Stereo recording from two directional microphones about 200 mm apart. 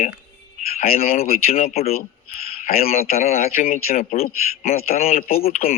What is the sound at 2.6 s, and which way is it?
Speech, 50° left (ahead or behind).